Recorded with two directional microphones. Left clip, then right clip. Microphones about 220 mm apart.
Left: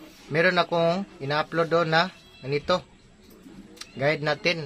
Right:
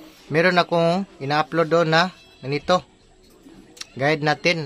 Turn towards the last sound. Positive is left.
turn(degrees=-40)  # may be behind; listen again after turning